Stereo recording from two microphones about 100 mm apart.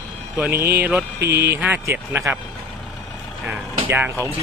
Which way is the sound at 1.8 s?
25° right (ahead or behind).